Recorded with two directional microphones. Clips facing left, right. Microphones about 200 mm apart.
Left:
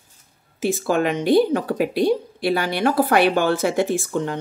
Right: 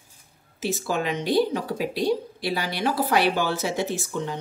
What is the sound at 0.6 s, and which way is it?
Speech, 55° left (ahead or behind).